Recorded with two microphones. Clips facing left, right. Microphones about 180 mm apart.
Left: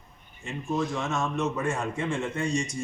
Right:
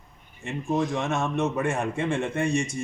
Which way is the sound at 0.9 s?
60° right (ahead or behind).